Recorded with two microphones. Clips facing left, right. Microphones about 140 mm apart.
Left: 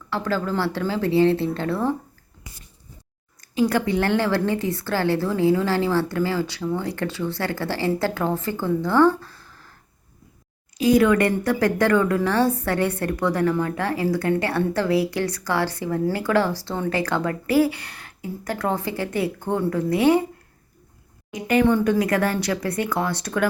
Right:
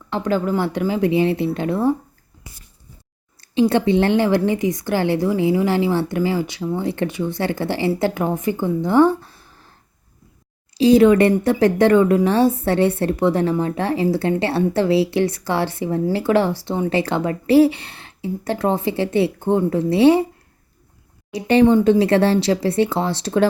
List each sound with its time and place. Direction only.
0.1 s speech: 20° right (ahead or behind)
3.4 s a woman's voice: 25° right (ahead or behind)
10.8 s a woman's voice: 25° right (ahead or behind)
21.3 s a woman's voice: 30° right (ahead or behind)